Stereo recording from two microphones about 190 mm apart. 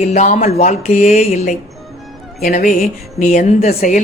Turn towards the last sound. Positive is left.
turn(degrees=40)  # may be behind; listen again after turning